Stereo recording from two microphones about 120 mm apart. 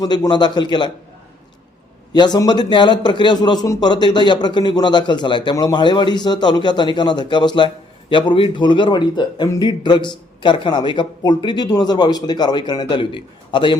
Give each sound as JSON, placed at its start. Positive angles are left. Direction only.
{"t": 0.0, "sound": "a man's voice", "side_deg": 35}
{"t": 2.1, "sound": "a man's voice", "side_deg": 35}